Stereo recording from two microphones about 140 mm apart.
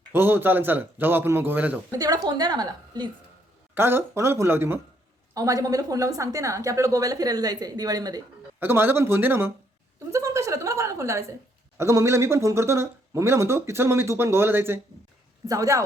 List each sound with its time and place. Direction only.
0.1 s a man's voice: 15° right (ahead or behind)
1.9 s speech: 25° right (ahead or behind)
3.8 s a man's voice: 15° right (ahead or behind)
8.5 s a man's voice: 15° right (ahead or behind)